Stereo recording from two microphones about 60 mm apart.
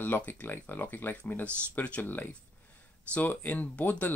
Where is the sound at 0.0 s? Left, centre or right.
Left.